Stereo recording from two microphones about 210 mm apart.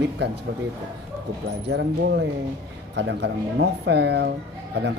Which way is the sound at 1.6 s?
55° right (ahead or behind).